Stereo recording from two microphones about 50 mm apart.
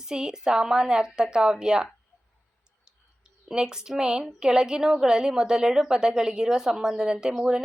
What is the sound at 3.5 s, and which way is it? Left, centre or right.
A woman's voice, centre.